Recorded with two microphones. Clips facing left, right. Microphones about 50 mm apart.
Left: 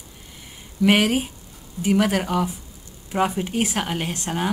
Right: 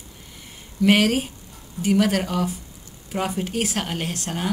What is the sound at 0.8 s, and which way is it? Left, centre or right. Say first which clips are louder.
Speech: even; centre.